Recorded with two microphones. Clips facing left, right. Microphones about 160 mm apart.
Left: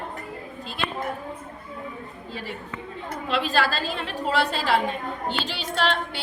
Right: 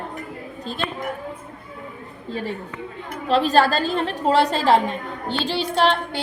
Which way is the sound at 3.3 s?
40° right (ahead or behind).